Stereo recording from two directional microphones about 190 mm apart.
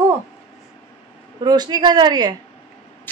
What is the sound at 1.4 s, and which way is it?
Speech, 20° right (ahead or behind).